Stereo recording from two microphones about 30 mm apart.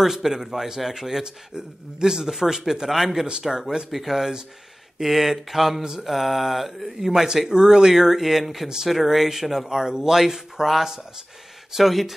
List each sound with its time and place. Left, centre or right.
0.0 s a man's voice: centre
2.0 s a man's voice: right; by 7.1 s centre
7.1 s a man's voice: right
9.7 s a man's voice: centre